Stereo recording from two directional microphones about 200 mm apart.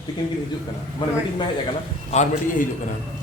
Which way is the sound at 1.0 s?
25° left (ahead or behind).